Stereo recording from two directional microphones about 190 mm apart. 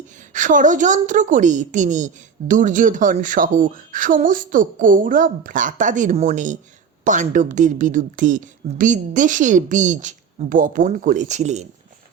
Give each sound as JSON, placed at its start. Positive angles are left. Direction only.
{"t": 0.2, "sound": "a woman's voice", "side_deg": -40}